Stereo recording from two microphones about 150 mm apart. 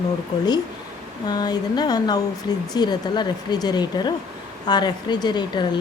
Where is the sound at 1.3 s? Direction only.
25° left (ahead or behind).